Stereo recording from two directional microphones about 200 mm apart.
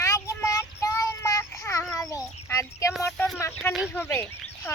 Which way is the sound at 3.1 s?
Centre (ahead or behind).